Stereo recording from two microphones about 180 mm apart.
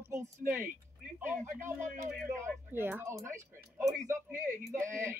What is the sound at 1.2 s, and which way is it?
Child singing, 10° right (ahead or behind).